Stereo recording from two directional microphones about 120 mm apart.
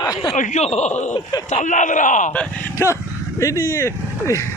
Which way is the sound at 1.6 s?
90° left.